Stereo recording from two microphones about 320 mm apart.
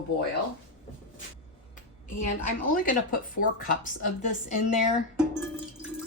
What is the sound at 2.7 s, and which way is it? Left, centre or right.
A woman's voice, left.